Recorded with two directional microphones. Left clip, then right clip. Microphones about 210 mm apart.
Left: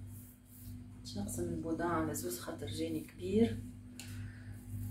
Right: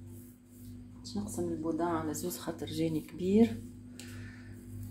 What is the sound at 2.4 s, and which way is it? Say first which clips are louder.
Speech: right 5 dB; 40° right (ahead or behind).